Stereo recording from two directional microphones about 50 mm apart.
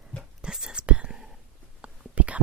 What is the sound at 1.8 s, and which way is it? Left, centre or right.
Whispering, right.